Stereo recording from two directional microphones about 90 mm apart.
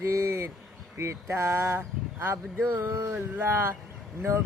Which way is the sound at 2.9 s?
40° right (ahead or behind).